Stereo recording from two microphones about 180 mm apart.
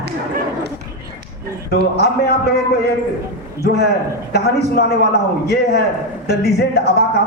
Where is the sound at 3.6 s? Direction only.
65° left (ahead or behind).